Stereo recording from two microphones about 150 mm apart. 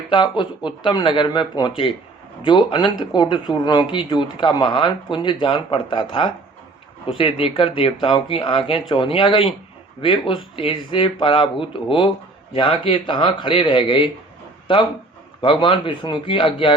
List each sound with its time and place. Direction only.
0.1 s speech: 30° left (ahead or behind)